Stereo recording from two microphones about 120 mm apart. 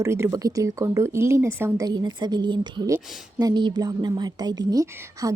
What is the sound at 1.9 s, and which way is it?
A woman's voice, 35° right (ahead or behind).